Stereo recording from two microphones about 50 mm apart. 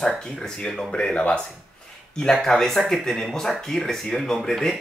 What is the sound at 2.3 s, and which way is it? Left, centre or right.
Speech, centre.